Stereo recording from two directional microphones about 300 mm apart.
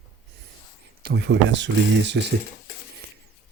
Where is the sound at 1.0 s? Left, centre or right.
Right.